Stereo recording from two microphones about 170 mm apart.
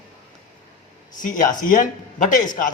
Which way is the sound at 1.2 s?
50° left (ahead or behind).